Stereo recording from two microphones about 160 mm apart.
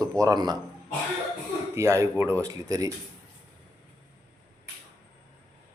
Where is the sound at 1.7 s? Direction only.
20° right (ahead or behind).